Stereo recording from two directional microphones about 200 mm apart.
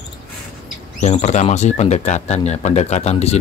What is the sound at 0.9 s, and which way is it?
Speech, 35° left (ahead or behind).